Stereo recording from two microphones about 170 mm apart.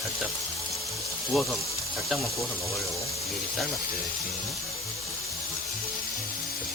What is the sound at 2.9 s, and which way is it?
Speech, 15° left (ahead or behind).